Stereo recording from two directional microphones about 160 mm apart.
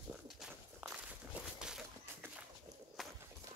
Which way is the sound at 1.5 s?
5° right (ahead or behind).